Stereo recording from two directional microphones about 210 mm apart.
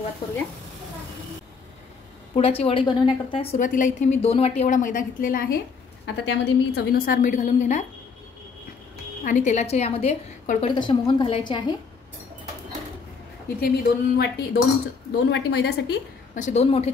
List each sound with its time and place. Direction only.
2.3 s a woman's voice: 30° left (ahead or behind)
3.5 s a woman's voice: 40° left (ahead or behind)
6.0 s a woman's voice: 55° left (ahead or behind); by 7.8 s 35° left (ahead or behind)
9.2 s a woman's voice: 35° left (ahead or behind)
10.7 s a woman's voice: 20° left (ahead or behind)
13.6 s a woman's voice: 45° left (ahead or behind); by 16.9 s 30° left (ahead or behind)